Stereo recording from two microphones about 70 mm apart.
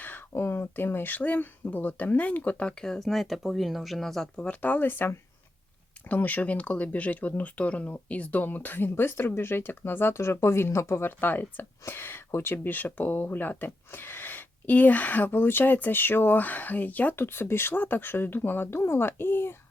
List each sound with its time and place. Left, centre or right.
0.0 s speech: left; by 4.3 s centre
4.4 s speech: left